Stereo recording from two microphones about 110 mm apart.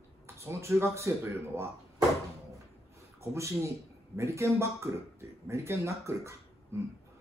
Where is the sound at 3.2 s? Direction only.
25° right (ahead or behind).